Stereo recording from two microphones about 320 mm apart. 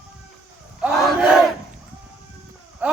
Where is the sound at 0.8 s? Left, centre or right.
Centre.